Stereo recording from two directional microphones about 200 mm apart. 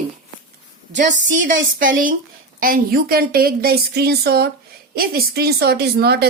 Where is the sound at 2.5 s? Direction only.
45° right (ahead or behind).